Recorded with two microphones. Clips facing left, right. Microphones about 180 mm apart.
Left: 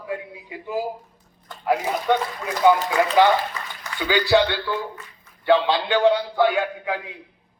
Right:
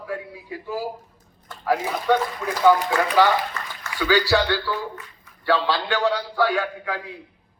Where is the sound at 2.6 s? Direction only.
20° left (ahead or behind).